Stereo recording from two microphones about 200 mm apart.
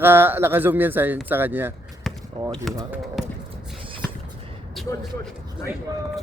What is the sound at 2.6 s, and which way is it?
Speech, centre (ahead or behind).